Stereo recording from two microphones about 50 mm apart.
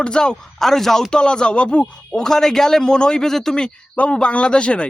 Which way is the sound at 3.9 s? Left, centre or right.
Left.